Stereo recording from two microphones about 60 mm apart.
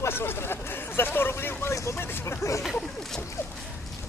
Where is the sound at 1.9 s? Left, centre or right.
Left.